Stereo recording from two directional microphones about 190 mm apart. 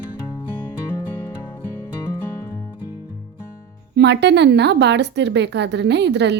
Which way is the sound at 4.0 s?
65° right (ahead or behind).